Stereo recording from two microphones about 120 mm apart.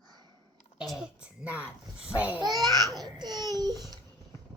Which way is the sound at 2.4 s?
Centre (ahead or behind).